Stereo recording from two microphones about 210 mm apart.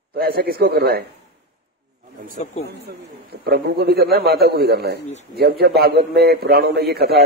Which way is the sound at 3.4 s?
50° right (ahead or behind).